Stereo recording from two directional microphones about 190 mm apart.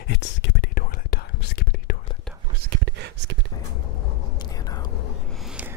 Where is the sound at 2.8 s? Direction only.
65° right (ahead or behind).